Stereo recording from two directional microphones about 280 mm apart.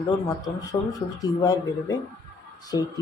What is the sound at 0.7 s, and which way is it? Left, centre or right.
Speech, centre.